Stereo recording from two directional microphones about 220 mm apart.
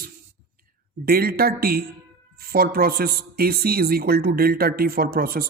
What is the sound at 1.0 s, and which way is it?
Speech, 45° right (ahead or behind).